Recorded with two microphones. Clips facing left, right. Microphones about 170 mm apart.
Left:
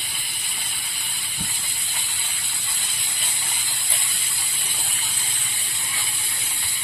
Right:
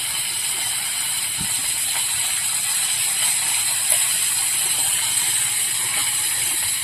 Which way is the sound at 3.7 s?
85° right.